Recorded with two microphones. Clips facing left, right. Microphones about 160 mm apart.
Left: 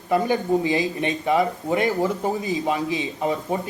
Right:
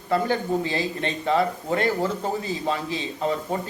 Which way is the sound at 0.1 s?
15° left (ahead or behind).